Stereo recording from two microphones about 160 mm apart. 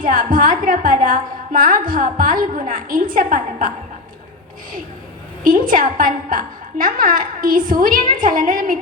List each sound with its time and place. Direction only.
0.0 s a woman's voice: 60° right (ahead or behind)
5.4 s a woman's voice: 60° right (ahead or behind)